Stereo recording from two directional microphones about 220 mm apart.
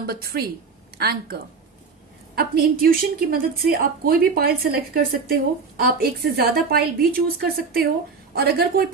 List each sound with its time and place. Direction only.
0.1 s a woman's voice: 45° right (ahead or behind)